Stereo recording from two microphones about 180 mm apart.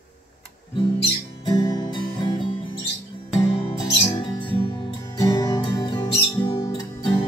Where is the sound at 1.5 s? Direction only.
25° left (ahead or behind).